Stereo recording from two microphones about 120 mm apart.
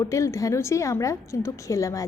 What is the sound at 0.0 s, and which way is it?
A woman's voice, 25° left (ahead or behind).